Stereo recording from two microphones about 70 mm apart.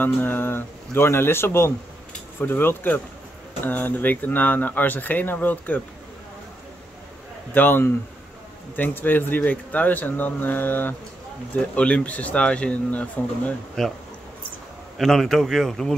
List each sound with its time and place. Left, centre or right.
0.0 s speech: left
7.5 s speech: left
11.7 s speech: centre
13.8 s speech: centre
15.0 s speech: centre